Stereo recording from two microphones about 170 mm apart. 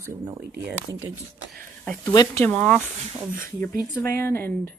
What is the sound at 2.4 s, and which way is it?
Speech, 5° left (ahead or behind).